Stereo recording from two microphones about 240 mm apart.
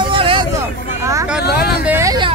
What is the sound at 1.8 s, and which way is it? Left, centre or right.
Vehicle, centre.